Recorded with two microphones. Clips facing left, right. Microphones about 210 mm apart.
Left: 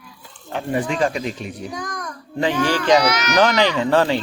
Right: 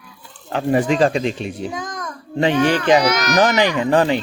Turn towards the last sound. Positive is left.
turn(degrees=-15)  # may be behind; listen again after turning